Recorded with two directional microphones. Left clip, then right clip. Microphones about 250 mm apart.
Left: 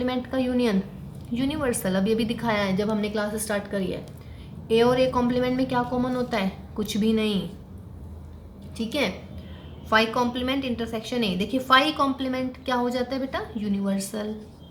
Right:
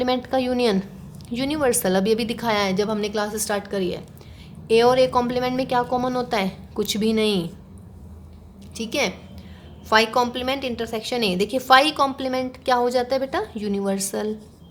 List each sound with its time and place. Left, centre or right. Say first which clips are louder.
0.0 s a woman's voice: right 5 dB; right
8.7 s a woman's voice: right 3 dB; right